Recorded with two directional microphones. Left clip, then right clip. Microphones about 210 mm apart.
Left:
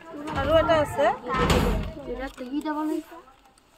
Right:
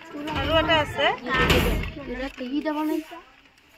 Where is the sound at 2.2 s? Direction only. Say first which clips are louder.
Right 5 dB; 55° right (ahead or behind).